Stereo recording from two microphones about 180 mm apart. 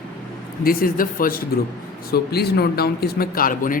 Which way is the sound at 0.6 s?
50° left (ahead or behind).